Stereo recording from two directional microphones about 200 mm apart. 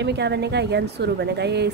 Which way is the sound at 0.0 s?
60° right (ahead or behind).